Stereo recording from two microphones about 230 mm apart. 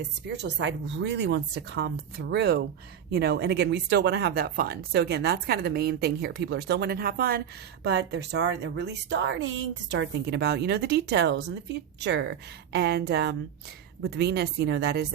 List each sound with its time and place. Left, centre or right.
0.4 s a woman's voice: right